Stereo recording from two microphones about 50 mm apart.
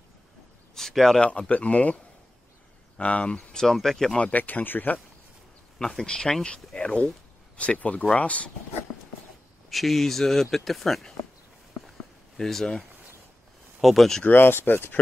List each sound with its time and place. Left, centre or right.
0.7 s speech: centre
1.5 s speech: left
3.0 s speech: left
3.6 s speech: centre
4.2 s speech: left
5.8 s speech: centre; by 8.5 s left
9.7 s speech: centre
12.4 s speech: centre
13.7 s speech: centre
14.2 s speech: left